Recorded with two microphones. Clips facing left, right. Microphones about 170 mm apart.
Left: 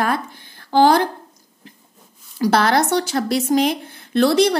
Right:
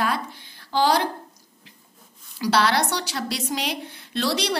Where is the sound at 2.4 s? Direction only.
50° left (ahead or behind).